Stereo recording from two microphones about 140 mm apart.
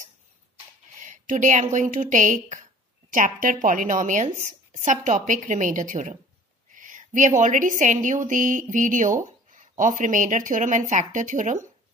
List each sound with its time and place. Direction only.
0.9 s a woman's voice: 65° right (ahead or behind)